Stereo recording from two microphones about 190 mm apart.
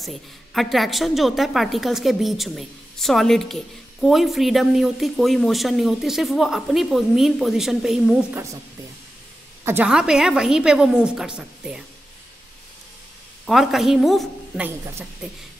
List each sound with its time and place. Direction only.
0.0 s a woman's voice: centre (ahead or behind)
9.7 s a woman's voice: 5° right (ahead or behind)
13.5 s a woman's voice: centre (ahead or behind)